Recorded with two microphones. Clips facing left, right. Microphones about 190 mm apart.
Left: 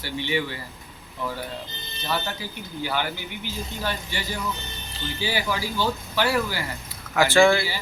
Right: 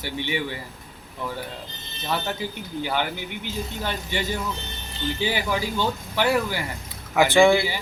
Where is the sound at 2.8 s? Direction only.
20° right (ahead or behind).